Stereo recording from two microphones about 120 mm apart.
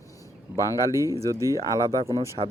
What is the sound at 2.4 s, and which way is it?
Speech, 65° right (ahead or behind).